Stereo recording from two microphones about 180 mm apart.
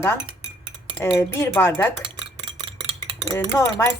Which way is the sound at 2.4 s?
30° right (ahead or behind).